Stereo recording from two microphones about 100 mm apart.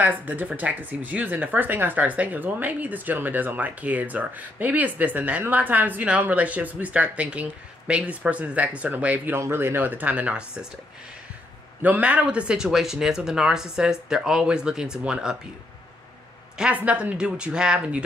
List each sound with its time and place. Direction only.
0.0 s speech: 15° right (ahead or behind)
11.8 s speech: 15° right (ahead or behind)
16.5 s speech: 10° right (ahead or behind)